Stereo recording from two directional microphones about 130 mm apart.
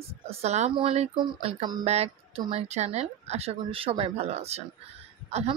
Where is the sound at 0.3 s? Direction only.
55° right (ahead or behind).